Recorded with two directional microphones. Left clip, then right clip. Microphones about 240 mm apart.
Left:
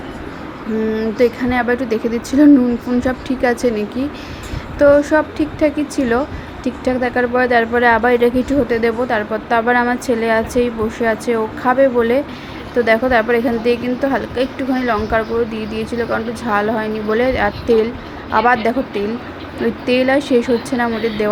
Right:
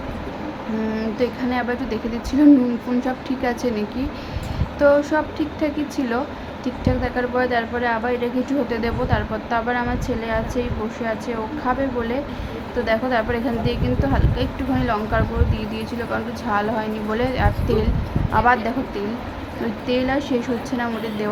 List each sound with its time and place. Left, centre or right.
0.9 s a woman's voice: centre
19.9 s a woman's voice: left